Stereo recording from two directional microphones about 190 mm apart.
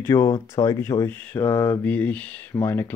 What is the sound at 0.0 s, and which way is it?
Speech, 15° left (ahead or behind).